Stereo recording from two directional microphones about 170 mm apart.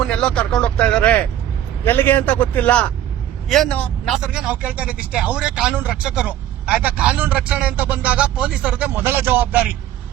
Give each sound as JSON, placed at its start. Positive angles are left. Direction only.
{"t": 0.0, "sound": "a man's voice", "side_deg": 5}